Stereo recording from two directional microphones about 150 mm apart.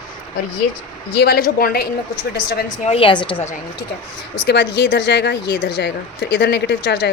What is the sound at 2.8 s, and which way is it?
Speech, 40° left (ahead or behind).